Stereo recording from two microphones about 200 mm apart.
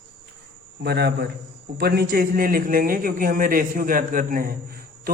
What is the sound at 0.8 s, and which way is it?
A man's voice, 55° right (ahead or behind).